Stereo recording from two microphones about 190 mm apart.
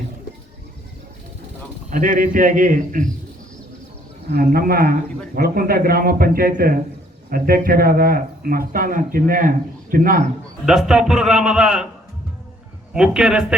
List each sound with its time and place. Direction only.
1.9 s speech: 40° right (ahead or behind)
4.3 s speech: 55° right (ahead or behind)
10.7 s a man's voice: 5° right (ahead or behind)
12.9 s a man's voice: 5° right (ahead or behind)